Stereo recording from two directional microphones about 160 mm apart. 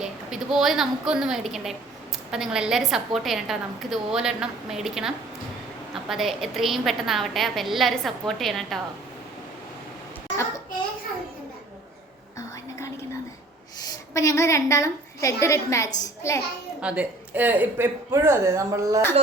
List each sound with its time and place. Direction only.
0.0 s a woman's voice: 5° right (ahead or behind)
13.7 s a woman's voice: 20° left (ahead or behind)
16.8 s speech: 5° right (ahead or behind)